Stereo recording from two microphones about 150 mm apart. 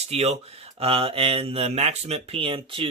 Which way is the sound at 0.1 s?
45° right (ahead or behind).